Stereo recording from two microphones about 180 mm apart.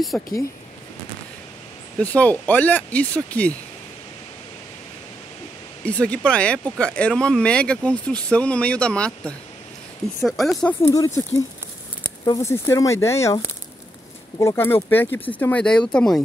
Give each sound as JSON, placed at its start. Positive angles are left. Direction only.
{"t": 0.1, "sound": "speech", "side_deg": 0}
{"t": 2.0, "sound": "speech", "side_deg": 10}
{"t": 5.9, "sound": "speech", "side_deg": 5}
{"t": 10.8, "sound": "speech", "side_deg": 20}
{"t": 12.3, "sound": "speech", "side_deg": 15}
{"t": 14.4, "sound": "speech", "side_deg": 15}